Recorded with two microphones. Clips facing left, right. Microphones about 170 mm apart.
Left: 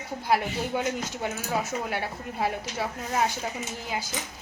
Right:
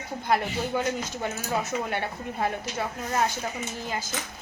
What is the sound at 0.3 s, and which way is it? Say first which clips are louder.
Speech: even; 5° left (ahead or behind).